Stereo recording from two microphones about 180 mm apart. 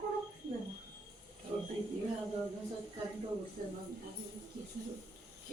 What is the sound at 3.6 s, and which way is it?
Speech, 50° right (ahead or behind).